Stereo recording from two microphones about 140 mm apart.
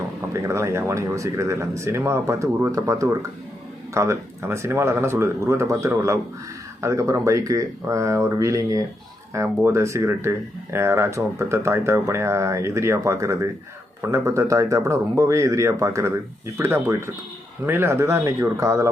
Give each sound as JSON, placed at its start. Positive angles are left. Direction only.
{"t": 0.4, "sound": "speech", "side_deg": -20}